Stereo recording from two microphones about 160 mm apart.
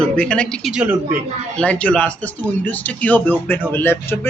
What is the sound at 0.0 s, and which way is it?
Speech, 5° left (ahead or behind).